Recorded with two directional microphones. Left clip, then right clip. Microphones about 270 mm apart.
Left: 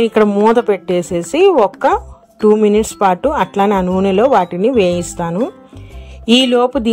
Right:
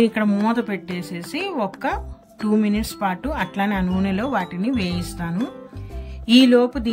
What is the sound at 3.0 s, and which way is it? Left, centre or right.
Speech, left.